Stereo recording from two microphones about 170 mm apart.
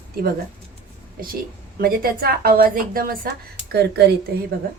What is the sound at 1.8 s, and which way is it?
A woman's voice, 60° right (ahead or behind).